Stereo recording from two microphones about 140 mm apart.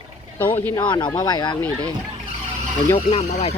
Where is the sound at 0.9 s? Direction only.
30° left (ahead or behind).